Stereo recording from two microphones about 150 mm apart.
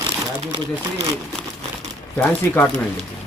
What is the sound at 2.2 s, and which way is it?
Speech, 10° left (ahead or behind).